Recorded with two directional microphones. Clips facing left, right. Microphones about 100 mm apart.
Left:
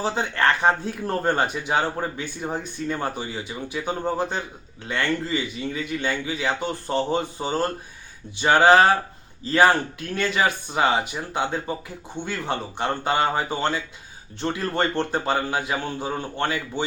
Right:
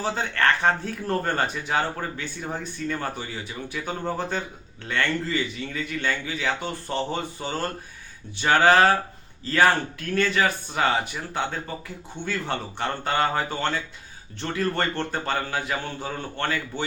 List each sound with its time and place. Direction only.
0.0 s speech: 15° left (ahead or behind)